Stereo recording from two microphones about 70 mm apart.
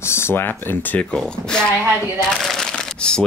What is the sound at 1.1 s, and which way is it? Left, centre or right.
Speech, centre.